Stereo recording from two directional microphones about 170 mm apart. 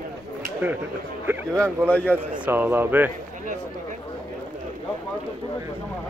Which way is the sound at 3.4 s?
50° right (ahead or behind).